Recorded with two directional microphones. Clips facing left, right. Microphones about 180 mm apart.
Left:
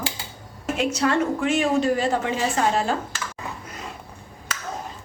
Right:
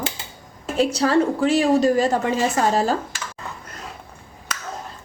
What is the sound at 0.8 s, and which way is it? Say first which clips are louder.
A woman's voice: right 4 dB; 35° right (ahead or behind).